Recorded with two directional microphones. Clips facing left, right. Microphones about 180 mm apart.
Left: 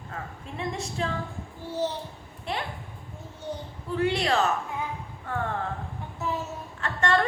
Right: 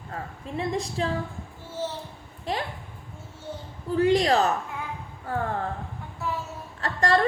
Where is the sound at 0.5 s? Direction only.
35° right (ahead or behind).